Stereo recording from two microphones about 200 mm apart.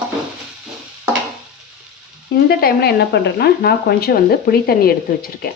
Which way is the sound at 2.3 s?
50° left (ahead or behind).